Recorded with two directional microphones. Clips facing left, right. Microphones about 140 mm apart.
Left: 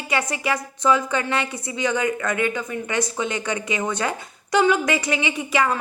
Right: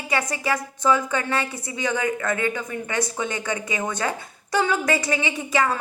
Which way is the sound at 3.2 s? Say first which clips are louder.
Left 2 dB; 20° left (ahead or behind).